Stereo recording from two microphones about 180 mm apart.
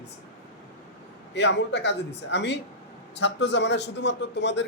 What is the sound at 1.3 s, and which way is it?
A man's voice, 75° left (ahead or behind).